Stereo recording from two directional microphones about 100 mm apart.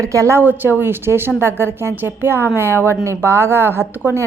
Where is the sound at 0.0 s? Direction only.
30° right (ahead or behind).